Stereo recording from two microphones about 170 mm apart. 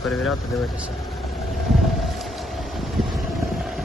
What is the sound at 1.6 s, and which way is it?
Boat, centre (ahead or behind).